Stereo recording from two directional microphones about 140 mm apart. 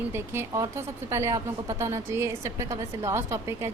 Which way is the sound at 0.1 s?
20° right (ahead or behind).